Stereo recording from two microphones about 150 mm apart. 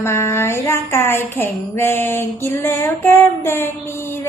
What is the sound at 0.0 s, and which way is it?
A woman's voice, 15° left (ahead or behind).